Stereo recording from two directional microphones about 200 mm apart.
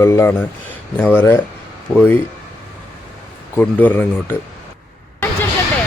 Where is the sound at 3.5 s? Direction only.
10° left (ahead or behind).